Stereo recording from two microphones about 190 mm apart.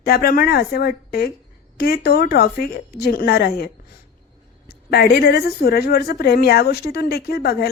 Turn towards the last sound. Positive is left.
turn(degrees=55)  # may be behind; listen again after turning